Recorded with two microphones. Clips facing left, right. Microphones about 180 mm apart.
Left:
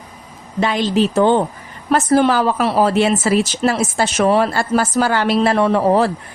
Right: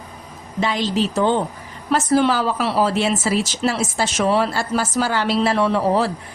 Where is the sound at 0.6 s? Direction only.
55° left (ahead or behind).